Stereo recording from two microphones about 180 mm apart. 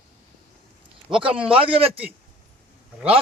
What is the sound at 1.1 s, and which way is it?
Speech, 5° right (ahead or behind).